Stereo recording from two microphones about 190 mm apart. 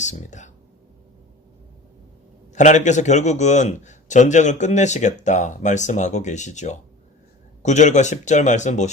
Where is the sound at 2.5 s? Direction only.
40° left (ahead or behind).